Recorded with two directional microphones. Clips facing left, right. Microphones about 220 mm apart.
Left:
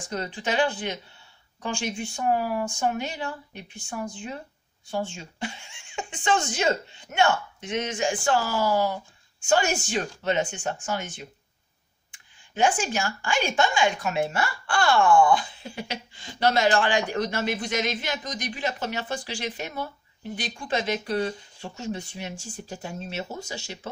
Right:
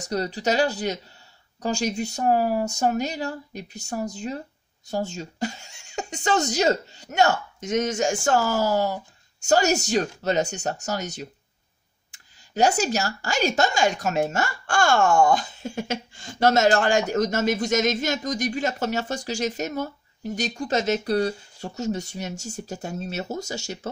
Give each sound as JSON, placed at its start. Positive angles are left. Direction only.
{"t": 0.0, "sound": "speech", "side_deg": -40}